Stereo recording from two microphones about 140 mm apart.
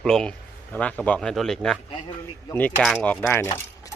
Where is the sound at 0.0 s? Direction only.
5° left (ahead or behind).